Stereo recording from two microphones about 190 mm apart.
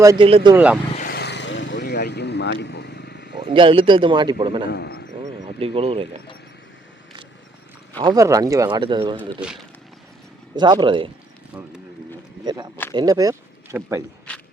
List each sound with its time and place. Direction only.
0.0 s speech: 15° right (ahead or behind)
0.3 s a man's voice: 30° right (ahead or behind)
0.5 s speech: 5° right (ahead or behind)
0.9 s vehicle: 50° left (ahead or behind)
3.4 s a man's voice: 25° right (ahead or behind)
4.7 s speech: 55° left (ahead or behind)
5.5 s speech: 30° right (ahead or behind)
7.9 s a man's voice: 20° right (ahead or behind)
9.1 s speech: 5° right (ahead or behind)
10.5 s a man's voice: 25° right (ahead or behind)
12.5 s a man's voice: 20° right (ahead or behind)